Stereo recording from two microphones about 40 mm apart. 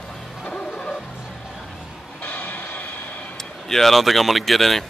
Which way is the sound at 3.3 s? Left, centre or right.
Centre.